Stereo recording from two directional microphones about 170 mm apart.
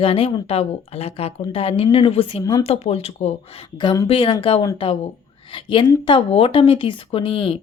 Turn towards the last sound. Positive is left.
turn(degrees=30)  # may be behind; listen again after turning